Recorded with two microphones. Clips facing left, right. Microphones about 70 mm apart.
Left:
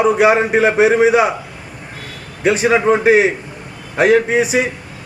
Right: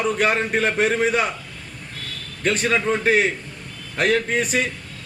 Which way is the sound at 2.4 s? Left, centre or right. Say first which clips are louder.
Left 8 dB; centre.